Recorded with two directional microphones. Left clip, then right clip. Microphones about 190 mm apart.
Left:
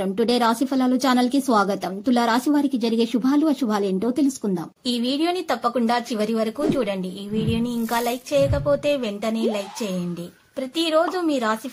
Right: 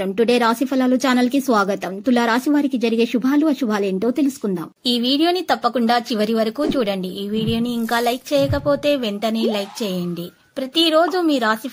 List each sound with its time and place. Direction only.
0.0 s a woman's voice: 15° right (ahead or behind)
4.8 s a woman's voice: 25° right (ahead or behind)
10.8 s a woman's voice: 25° right (ahead or behind)